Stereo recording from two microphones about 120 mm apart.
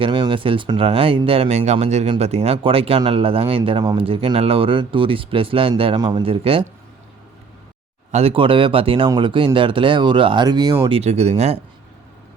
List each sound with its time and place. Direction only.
0.0 s speech: 45° right (ahead or behind)
6.0 s speech: 35° right (ahead or behind)
6.2 s speech: 50° right (ahead or behind)
8.1 s speech: 50° right (ahead or behind); by 10.8 s 35° right (ahead or behind)
10.8 s speech: 55° right (ahead or behind)